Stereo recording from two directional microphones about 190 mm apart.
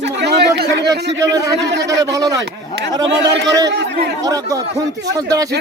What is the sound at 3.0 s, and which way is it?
Speech, 65° right (ahead or behind).